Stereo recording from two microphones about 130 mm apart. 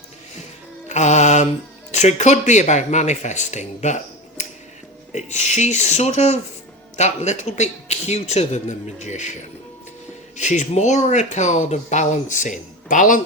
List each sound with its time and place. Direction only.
0.9 s music: 65° left (ahead or behind)
1.9 s speech: 60° left (ahead or behind)
5.1 s speech: 65° left (ahead or behind)
10.3 s speech: 65° left (ahead or behind); by 13.2 s 85° left